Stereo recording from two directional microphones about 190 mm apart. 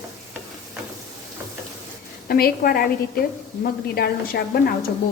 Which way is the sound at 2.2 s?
55° left (ahead or behind).